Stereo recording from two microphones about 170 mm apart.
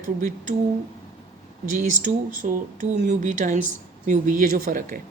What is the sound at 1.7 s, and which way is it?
A man's voice, 50° right (ahead or behind).